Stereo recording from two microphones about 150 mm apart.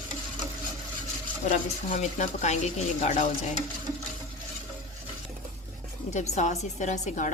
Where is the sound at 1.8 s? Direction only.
55° left (ahead or behind).